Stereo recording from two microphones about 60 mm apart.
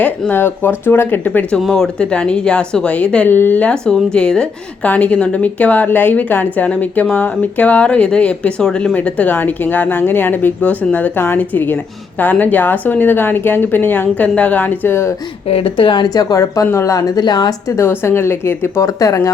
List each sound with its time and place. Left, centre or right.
0.0 s a woman's voice: left
1.7 s speech: centre
3.2 s a woman's voice: left
3.8 s speech: centre
4.9 s speech: left
9.0 s a woman's voice: left
14.8 s speech: left
16.0 s speech: left
16.7 s speech: left
17.7 s speech: left
18.8 s speech: left